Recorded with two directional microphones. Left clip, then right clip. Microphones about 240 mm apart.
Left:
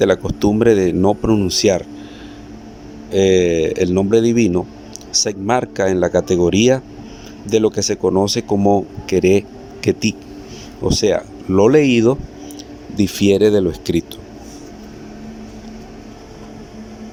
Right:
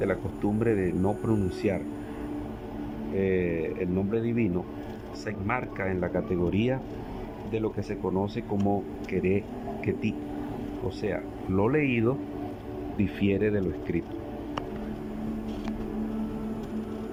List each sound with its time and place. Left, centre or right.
0.0 s speech: left
3.2 s speech: left
10.8 s speech: left